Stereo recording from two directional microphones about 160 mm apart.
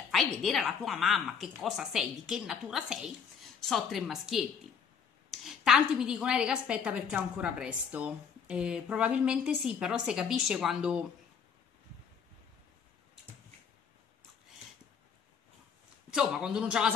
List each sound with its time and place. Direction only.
0.1 s a woman's voice: centre (ahead or behind)
16.1 s a woman's voice: 5° right (ahead or behind)